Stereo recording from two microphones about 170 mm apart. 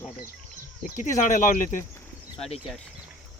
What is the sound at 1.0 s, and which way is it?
Speech, 50° left (ahead or behind).